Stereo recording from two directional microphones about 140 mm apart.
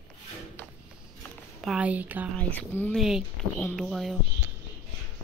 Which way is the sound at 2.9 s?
5° right (ahead or behind).